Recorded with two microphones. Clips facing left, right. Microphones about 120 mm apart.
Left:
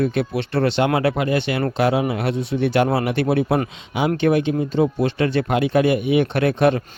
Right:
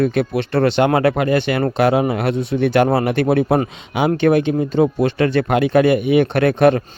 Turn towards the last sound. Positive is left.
turn(degrees=-55)  # may be behind; listen again after turning